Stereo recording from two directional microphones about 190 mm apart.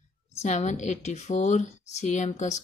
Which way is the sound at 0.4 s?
35° left (ahead or behind).